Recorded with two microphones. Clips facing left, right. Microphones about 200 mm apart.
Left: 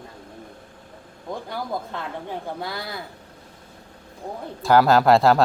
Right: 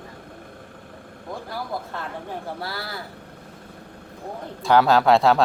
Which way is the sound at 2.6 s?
20° left (ahead or behind).